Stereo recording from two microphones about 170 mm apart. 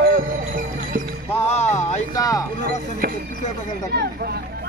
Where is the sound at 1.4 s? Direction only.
40° left (ahead or behind).